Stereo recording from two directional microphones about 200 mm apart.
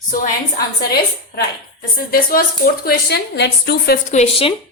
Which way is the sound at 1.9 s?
45° left (ahead or behind).